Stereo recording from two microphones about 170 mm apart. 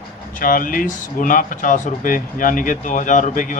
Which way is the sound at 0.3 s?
55° left (ahead or behind).